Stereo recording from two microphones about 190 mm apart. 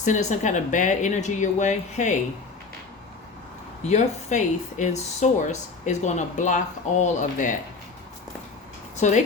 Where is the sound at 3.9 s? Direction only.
40° left (ahead or behind).